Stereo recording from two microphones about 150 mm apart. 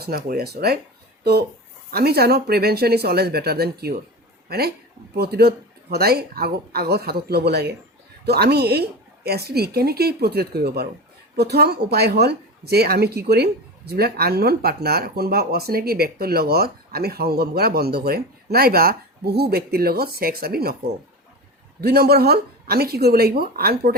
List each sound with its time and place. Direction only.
0.3 s a woman's voice: 90° right
21.8 s a woman's voice: 90° right